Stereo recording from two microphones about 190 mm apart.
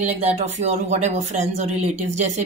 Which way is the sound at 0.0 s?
35° right (ahead or behind).